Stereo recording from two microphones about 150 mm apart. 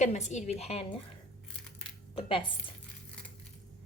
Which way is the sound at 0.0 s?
50° left (ahead or behind).